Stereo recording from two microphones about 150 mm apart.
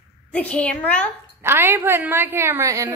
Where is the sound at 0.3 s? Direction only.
10° left (ahead or behind).